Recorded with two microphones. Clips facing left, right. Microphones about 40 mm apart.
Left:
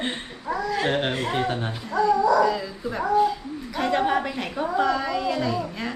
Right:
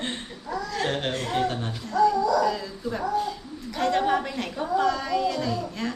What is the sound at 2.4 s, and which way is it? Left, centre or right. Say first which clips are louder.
A woman's voice: left 2 dB; centre.